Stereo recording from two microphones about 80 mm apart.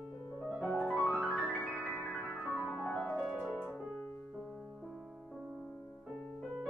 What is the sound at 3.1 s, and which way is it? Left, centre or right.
Piano, centre.